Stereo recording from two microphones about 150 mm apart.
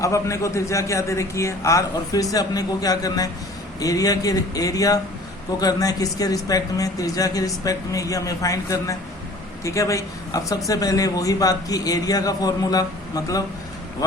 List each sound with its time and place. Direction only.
0.0 s speech: 20° left (ahead or behind)